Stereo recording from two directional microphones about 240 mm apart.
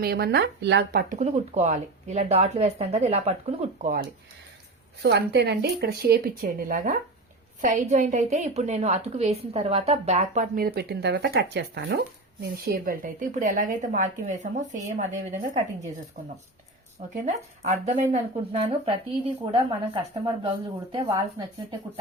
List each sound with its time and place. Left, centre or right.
0.0 s speech: right
5.0 s a woman's voice: right
17.2 s speech: right